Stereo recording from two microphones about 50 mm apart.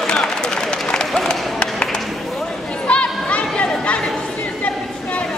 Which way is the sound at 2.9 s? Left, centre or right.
Left.